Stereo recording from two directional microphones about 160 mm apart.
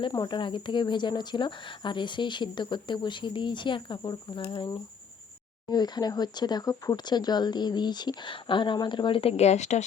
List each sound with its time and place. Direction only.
0.0 s speech: 30° left (ahead or behind); by 9.8 s 45° left (ahead or behind)